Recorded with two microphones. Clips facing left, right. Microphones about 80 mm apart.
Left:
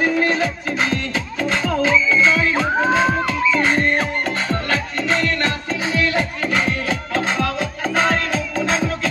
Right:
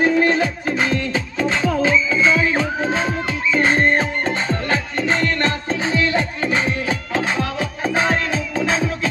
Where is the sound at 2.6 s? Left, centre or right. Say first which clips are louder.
Left 3 dB; left.